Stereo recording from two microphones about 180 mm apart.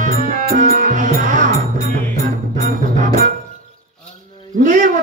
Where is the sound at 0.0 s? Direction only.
50° right (ahead or behind).